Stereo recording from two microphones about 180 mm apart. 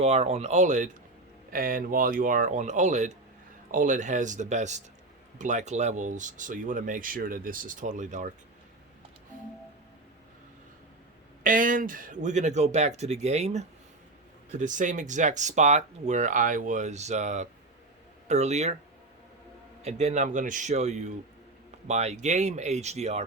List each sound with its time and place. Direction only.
0.0 s speech: 35° right (ahead or behind)
11.4 s speech: 50° right (ahead or behind)
19.8 s speech: 35° right (ahead or behind)